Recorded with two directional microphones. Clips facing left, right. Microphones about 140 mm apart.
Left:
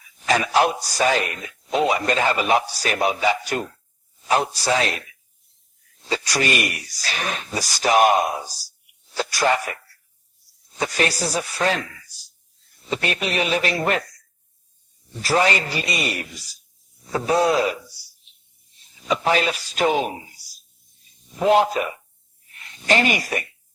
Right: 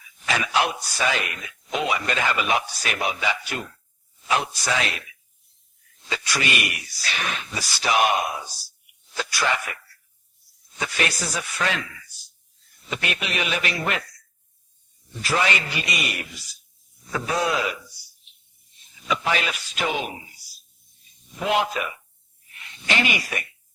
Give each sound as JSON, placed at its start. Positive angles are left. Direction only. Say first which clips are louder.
{"t": 0.3, "sound": "a man's voice", "louder": "left 5 dB", "side_deg": 40}
{"t": 6.1, "sound": "a man's voice", "louder": "left 4 dB", "side_deg": 35}
{"t": 15.1, "sound": "a man's voice", "louder": "left 4 dB", "side_deg": 35}
{"t": 19.0, "sound": "a man's voice", "louder": "left 5 dB", "side_deg": 35}